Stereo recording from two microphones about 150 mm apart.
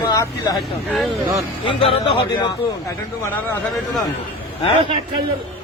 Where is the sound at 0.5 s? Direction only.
Centre (ahead or behind).